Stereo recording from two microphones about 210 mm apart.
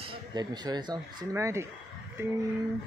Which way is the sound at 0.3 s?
20° right (ahead or behind).